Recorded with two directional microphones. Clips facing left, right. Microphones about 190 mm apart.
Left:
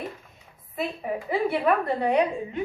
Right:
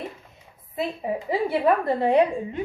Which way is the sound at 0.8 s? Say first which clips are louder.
Right 2 dB; 20° right (ahead or behind).